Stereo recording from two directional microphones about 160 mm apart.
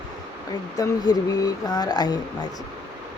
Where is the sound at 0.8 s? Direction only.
25° left (ahead or behind).